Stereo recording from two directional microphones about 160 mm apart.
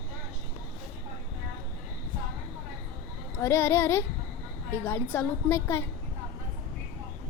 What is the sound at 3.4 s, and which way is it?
A woman's voice, 15° left (ahead or behind).